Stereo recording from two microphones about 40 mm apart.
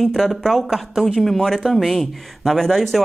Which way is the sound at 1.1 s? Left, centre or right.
Centre.